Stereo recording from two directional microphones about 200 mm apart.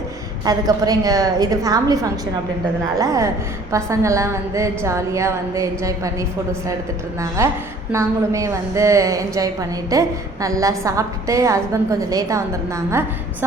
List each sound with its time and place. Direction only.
0.4 s a woman's voice: 20° right (ahead or behind)